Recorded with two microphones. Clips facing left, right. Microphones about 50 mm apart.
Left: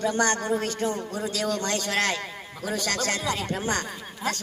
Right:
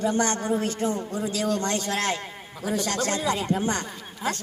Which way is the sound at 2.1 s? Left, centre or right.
Left.